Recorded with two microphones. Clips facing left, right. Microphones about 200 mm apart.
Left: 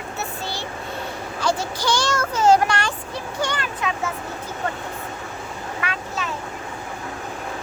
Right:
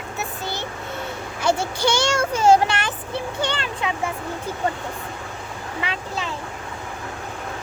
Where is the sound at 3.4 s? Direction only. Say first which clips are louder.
Left 3 dB; 25° right (ahead or behind).